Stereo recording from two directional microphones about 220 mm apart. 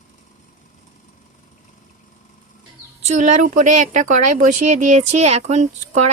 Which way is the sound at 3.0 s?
30° right (ahead or behind).